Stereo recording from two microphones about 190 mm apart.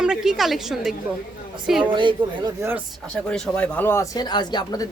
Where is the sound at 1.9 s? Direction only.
25° right (ahead or behind).